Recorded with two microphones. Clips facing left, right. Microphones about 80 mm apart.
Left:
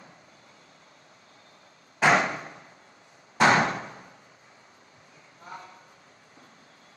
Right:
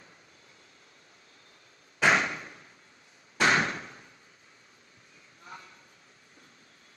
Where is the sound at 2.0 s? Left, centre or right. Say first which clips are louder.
Left 3 dB; left.